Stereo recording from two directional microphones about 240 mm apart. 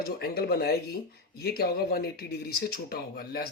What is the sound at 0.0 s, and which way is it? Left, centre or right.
Speech, left.